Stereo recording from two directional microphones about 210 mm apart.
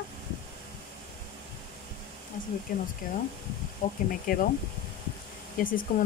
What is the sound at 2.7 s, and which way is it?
Speech, 40° left (ahead or behind).